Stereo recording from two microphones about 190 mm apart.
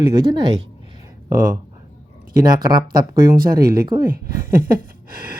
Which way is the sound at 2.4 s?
20° right (ahead or behind).